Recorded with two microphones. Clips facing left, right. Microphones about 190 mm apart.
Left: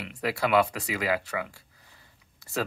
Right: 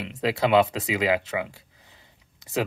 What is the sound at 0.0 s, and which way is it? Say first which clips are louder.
Speech: right 4 dB; 20° right (ahead or behind).